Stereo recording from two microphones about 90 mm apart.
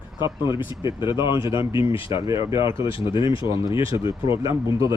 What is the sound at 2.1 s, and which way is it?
Speech, 35° right (ahead or behind).